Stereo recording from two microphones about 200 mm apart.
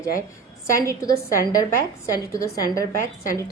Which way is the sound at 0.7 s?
15° left (ahead or behind).